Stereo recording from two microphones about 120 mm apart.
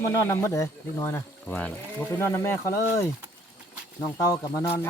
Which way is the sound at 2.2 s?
20° left (ahead or behind).